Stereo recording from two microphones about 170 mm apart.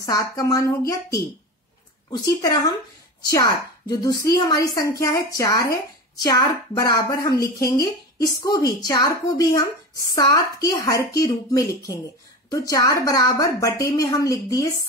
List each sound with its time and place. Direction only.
0.0 s a woman's voice: 20° left (ahead or behind)